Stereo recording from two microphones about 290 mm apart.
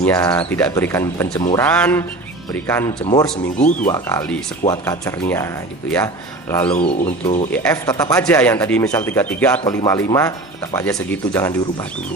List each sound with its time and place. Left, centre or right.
0.0 s speech: centre
3.0 s speech: centre
6.5 s speech: centre
6.7 s speech: centre
7.5 s speech: centre